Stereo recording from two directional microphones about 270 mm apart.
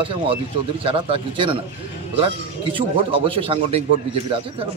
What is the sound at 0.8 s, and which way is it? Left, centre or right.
Speech, centre.